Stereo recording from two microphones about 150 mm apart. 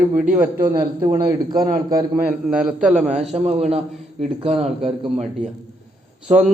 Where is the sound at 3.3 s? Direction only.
45° right (ahead or behind).